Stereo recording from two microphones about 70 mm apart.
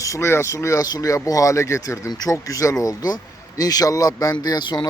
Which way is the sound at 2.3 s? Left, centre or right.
Left.